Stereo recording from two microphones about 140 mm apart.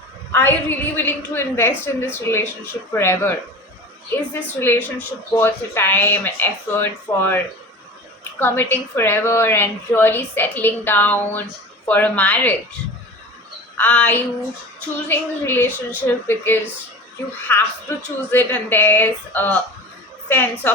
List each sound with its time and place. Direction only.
0.3 s a woman's voice: 15° left (ahead or behind)
13.7 s a woman's voice: 10° left (ahead or behind)